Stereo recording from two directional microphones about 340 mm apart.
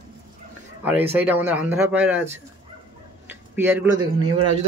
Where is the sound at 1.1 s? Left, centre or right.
Centre.